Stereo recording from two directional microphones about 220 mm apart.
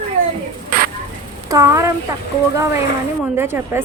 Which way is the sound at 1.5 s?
15° right (ahead or behind).